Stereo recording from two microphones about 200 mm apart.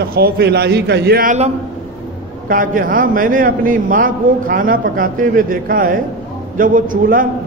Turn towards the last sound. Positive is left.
turn(degrees=-40)  # may be behind; listen again after turning